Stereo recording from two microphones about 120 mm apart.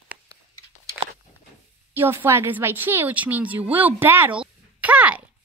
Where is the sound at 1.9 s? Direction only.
20° right (ahead or behind).